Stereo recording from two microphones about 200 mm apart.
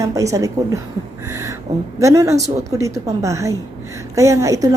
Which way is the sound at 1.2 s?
15° right (ahead or behind).